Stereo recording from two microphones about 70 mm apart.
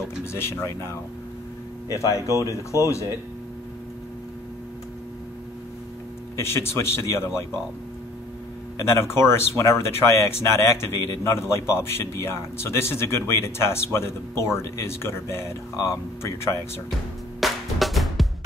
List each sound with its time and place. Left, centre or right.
0.2 s speech: left
6.3 s speech: left
8.7 s speech: left
17.4 s music: centre